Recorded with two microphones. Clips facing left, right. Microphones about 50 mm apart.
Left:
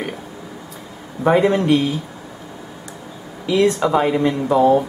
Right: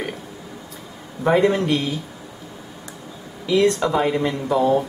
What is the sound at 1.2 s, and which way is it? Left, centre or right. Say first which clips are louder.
Speech: left 2 dB; centre.